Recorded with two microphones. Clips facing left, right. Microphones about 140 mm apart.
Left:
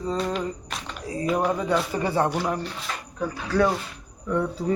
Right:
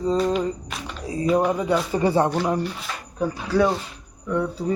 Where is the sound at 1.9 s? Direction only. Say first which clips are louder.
Right 4 dB; 25° right (ahead or behind).